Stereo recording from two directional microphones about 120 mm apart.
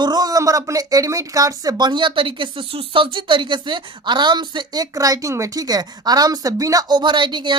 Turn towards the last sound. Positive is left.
turn(degrees=-40)  # may be behind; listen again after turning